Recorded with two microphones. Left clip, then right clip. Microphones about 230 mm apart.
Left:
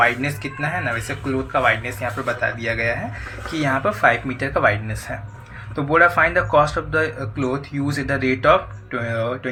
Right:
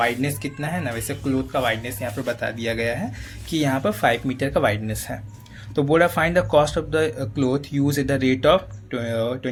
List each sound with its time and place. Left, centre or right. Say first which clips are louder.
0.0 s speech: left 4 dB; right